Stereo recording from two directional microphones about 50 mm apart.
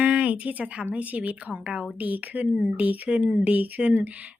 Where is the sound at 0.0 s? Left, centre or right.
Right.